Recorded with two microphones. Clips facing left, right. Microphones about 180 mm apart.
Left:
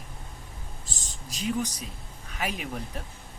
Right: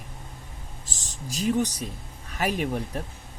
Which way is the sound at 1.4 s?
40° right (ahead or behind).